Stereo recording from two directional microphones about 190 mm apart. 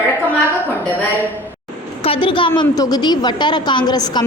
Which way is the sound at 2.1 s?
25° left (ahead or behind).